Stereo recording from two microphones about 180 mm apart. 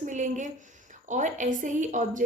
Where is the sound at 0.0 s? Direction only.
45° right (ahead or behind).